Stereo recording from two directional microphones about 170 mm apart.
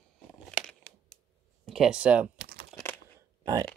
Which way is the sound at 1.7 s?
5° right (ahead or behind).